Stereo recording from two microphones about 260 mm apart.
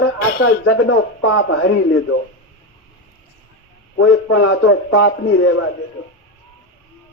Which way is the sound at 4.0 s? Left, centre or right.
Left.